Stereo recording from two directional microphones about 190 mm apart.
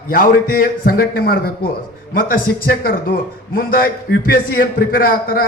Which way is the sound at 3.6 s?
50° left (ahead or behind).